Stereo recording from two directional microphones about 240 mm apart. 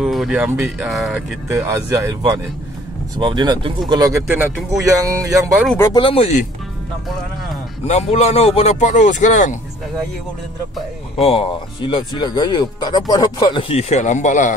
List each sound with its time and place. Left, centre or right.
0.0 s speech: centre
1.5 s speech: centre
5.9 s speech: left
7.8 s speech: left
11.1 s speech: left